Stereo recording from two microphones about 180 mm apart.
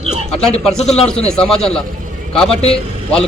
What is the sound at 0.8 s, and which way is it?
Speech, 35° left (ahead or behind).